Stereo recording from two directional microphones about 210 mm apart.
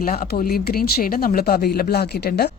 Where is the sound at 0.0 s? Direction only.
45° left (ahead or behind).